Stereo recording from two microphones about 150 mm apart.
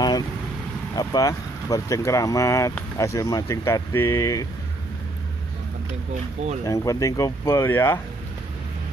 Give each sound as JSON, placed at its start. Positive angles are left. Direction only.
{"t": 0.9, "sound": "speech", "side_deg": 25}
{"t": 6.6, "sound": "speech", "side_deg": 20}